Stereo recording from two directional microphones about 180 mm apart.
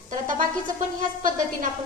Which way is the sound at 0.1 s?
45° right (ahead or behind).